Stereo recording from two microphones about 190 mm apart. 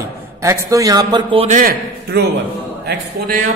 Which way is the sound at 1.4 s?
45° right (ahead or behind).